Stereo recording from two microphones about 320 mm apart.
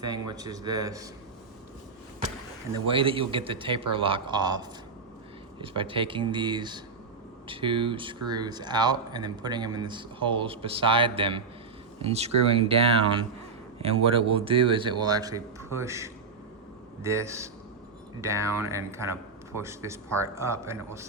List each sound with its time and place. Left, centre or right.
0.3 s speech: centre
2.9 s speech: centre